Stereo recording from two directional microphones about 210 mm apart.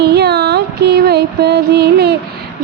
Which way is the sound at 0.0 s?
50° right (ahead or behind).